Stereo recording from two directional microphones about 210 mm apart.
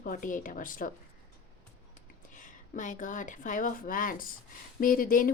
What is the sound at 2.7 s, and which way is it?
Speech, 35° left (ahead or behind).